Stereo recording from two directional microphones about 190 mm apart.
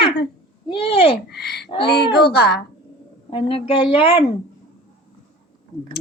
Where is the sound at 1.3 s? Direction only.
60° left (ahead or behind).